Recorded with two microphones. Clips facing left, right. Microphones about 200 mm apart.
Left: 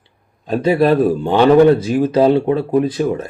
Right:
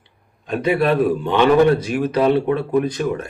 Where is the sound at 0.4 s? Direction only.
30° left (ahead or behind).